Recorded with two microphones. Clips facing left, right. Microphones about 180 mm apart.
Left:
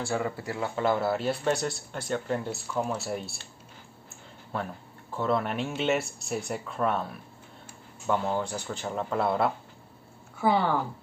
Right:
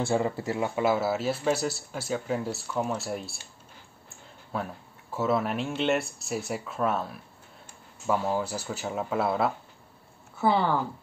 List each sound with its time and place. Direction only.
0.0 s speech: 25° right (ahead or behind)
0.7 s speech: 5° right (ahead or behind)
4.5 s speech: centre (ahead or behind)